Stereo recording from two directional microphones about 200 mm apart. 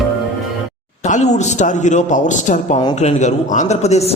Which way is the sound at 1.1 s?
35° left (ahead or behind).